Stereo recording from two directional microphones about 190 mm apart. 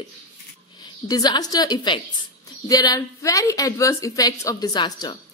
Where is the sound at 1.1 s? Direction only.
20° left (ahead or behind).